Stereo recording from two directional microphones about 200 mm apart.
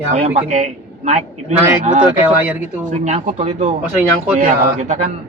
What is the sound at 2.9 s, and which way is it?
A man's voice, 35° right (ahead or behind).